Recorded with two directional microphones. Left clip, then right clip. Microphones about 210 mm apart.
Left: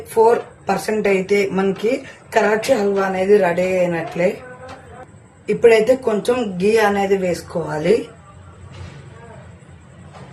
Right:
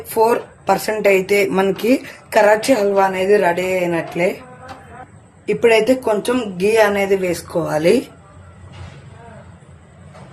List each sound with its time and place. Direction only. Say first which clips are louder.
0.1 s speech: left 1 dB; 35° right (ahead or behind)
5.5 s speech: left 1 dB; 25° right (ahead or behind)